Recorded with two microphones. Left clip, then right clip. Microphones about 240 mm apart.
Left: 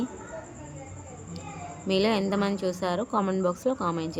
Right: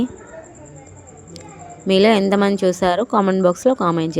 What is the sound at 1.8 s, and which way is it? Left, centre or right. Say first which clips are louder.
A woman's voice: right 11 dB; right.